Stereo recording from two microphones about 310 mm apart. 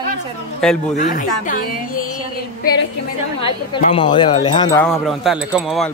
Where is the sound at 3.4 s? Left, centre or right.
Centre.